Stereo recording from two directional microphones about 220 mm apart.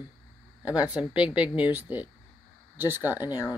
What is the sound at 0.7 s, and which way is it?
A woman's voice, 5° right (ahead or behind).